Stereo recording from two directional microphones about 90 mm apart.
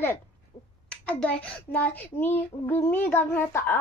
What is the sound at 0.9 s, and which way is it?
Speech, 15° left (ahead or behind).